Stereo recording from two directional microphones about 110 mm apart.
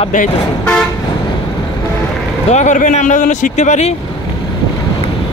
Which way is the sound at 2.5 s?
90° left.